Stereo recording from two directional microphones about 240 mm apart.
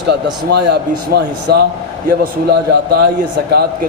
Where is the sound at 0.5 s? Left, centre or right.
Right.